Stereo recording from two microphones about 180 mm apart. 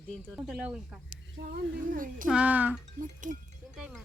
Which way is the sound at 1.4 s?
50° right (ahead or behind).